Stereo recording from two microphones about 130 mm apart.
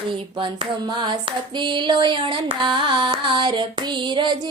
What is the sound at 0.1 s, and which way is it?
Female singing, 40° right (ahead or behind).